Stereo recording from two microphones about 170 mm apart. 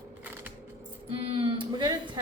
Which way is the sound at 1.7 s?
25° right (ahead or behind).